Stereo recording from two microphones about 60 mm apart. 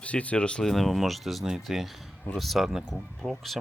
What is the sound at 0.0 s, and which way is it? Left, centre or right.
Speech, left.